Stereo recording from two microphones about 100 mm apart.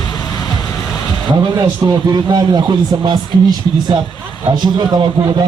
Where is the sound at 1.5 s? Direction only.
40° right (ahead or behind).